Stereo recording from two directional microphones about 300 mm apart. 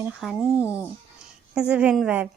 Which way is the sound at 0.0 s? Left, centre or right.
Centre.